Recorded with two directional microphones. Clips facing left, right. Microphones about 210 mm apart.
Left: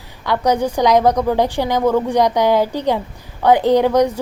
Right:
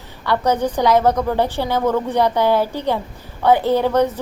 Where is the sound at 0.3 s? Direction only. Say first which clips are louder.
Left 1 dB; 10° left (ahead or behind).